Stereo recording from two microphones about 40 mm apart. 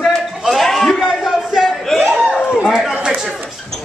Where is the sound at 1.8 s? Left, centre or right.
Centre.